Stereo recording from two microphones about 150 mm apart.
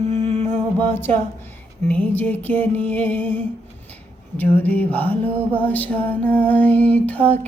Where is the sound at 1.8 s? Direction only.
10° left (ahead or behind).